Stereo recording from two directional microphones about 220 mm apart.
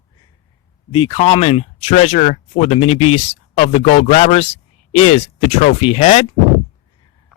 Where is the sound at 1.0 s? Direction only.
25° left (ahead or behind).